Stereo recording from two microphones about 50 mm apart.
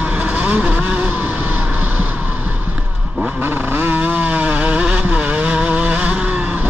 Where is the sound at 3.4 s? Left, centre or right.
Right.